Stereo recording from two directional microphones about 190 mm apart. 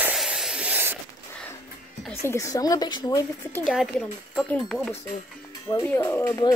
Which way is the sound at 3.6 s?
Centre (ahead or behind).